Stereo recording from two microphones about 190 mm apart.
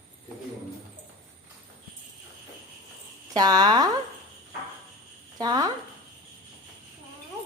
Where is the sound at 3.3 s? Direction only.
20° right (ahead or behind).